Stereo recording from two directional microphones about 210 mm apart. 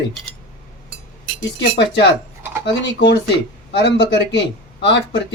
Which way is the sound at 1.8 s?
55° left (ahead or behind).